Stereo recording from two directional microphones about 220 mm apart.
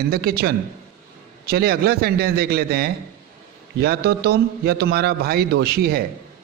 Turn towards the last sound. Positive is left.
turn(degrees=-45)  # may be behind; listen again after turning